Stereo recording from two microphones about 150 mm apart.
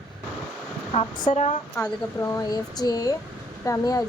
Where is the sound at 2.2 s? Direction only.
20° left (ahead or behind).